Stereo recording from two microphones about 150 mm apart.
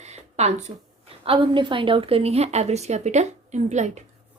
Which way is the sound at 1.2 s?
35° right (ahead or behind).